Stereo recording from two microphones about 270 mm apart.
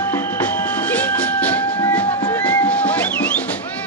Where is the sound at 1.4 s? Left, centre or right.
Centre.